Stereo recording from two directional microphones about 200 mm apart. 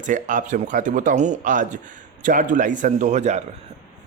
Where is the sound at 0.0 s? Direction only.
40° right (ahead or behind).